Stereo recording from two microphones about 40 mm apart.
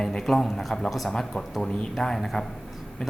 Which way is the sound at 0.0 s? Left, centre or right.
Centre.